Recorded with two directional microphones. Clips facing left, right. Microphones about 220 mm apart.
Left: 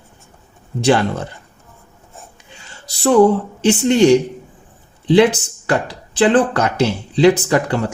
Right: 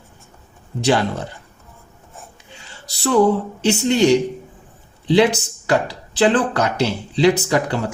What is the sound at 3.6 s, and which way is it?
Speech, 50° left (ahead or behind).